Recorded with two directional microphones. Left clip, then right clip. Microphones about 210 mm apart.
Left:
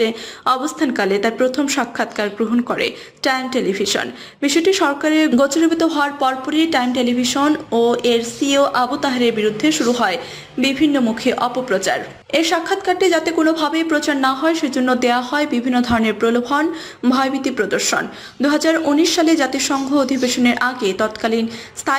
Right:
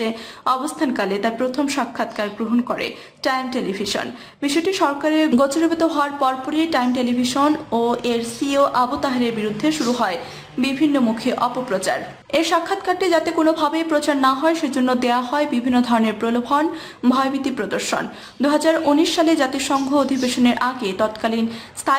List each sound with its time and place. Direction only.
0.0 s a woman's voice: 10° left (ahead or behind)